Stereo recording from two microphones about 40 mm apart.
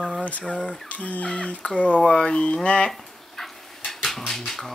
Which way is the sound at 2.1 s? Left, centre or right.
Left.